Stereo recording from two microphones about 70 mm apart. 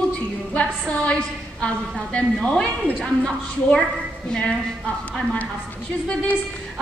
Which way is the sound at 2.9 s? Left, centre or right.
Centre.